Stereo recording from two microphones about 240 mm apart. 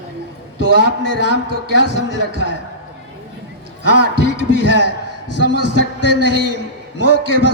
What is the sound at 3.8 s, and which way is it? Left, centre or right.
A man's voice, right.